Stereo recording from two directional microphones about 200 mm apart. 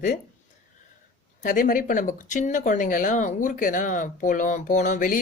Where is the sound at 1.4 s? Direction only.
40° left (ahead or behind).